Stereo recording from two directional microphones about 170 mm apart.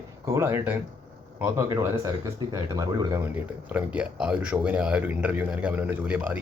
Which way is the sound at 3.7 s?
5° right (ahead or behind).